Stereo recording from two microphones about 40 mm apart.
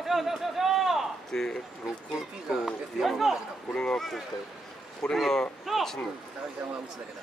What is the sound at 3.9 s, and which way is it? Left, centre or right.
Speech, centre.